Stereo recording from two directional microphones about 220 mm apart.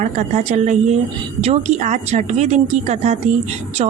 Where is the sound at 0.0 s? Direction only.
30° right (ahead or behind).